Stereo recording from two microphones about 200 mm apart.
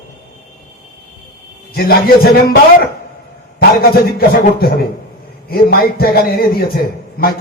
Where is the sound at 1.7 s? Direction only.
50° left (ahead or behind).